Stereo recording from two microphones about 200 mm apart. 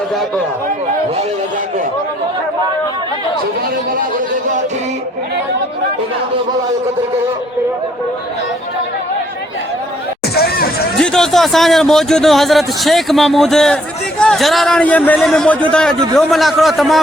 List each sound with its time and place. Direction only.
10.3 s hubbub: 50° left (ahead or behind)
11.0 s speech: 5° left (ahead or behind)